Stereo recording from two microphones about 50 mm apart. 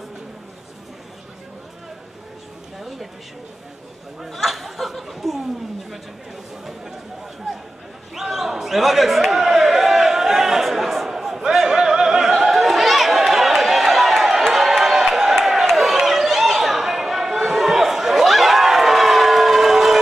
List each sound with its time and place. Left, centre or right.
4.2 s speech: centre
8.1 s a sound: centre
15.7 s chatter: centre